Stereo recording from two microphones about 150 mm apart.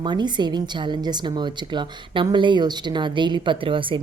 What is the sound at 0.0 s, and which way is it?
Speech, 30° right (ahead or behind).